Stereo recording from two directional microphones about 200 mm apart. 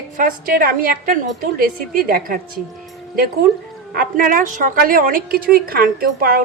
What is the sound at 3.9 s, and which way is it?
A woman's voice, 45° right (ahead or behind).